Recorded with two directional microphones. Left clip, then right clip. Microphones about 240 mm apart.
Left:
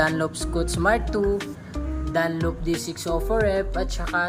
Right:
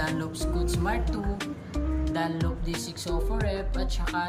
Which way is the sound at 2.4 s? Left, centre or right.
Centre.